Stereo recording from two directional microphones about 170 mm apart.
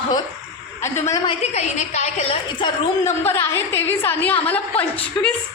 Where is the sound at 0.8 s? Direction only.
15° left (ahead or behind).